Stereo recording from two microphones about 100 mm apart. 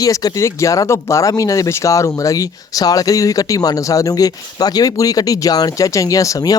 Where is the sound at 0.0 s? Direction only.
40° left (ahead or behind).